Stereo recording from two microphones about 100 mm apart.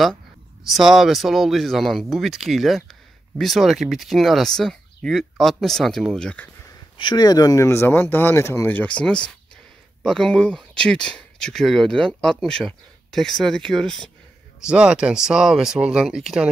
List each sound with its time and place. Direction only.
0.7 s speech: 5° right (ahead or behind)
7.0 s speech: 45° left (ahead or behind); by 14.1 s 5° left (ahead or behind)
14.6 s speech: 10° right (ahead or behind)